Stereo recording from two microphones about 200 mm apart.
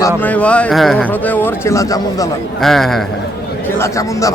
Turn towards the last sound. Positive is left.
turn(degrees=15)  # may be behind; listen again after turning